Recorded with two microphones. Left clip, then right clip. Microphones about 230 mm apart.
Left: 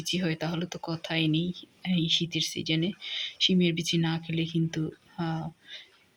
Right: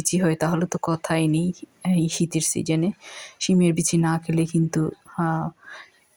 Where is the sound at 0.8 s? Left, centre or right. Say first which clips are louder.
Right 6 dB; right.